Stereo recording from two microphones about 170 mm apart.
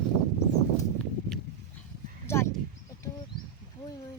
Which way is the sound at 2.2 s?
15° left (ahead or behind).